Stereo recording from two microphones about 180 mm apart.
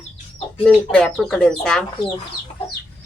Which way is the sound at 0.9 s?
5° left (ahead or behind).